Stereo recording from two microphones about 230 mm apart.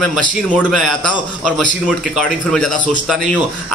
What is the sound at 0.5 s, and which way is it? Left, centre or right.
A man's voice, centre.